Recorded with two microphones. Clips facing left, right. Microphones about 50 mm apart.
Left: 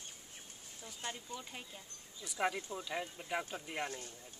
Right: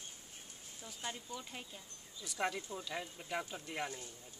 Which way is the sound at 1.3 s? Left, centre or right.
Centre.